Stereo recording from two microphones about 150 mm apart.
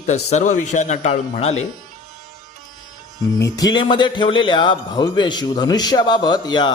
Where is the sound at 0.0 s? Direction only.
50° left (ahead or behind).